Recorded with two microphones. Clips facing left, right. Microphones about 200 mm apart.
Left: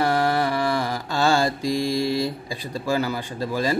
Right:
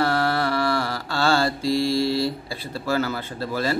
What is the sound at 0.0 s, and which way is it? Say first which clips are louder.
Mantra: left 1 dB; 15° left (ahead or behind).